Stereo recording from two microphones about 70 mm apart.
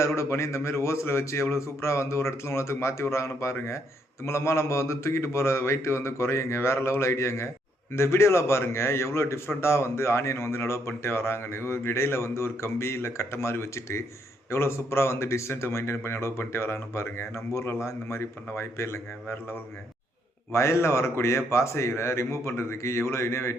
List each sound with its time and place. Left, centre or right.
0.2 s speech: left